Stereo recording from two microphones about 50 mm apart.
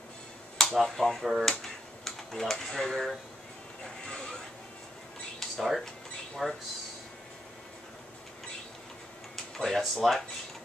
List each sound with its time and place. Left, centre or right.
0.6 s speech: centre
1.6 s computer keyboard: centre
3.8 s music: centre
5.4 s a sound: centre
6.4 s speech: centre
9.6 s speech: centre